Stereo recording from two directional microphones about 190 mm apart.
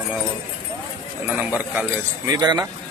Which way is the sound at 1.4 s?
10° right (ahead or behind).